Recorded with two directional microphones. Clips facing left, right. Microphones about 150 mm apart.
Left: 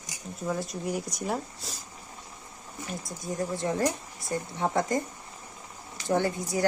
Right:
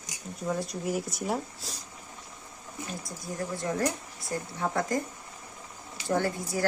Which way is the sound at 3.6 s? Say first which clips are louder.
Even; 25° left (ahead or behind).